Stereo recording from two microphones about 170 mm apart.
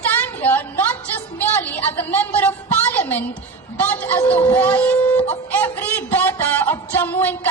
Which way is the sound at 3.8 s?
10° left (ahead or behind).